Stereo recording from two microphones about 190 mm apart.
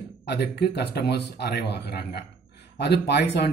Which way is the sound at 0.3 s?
60° left (ahead or behind).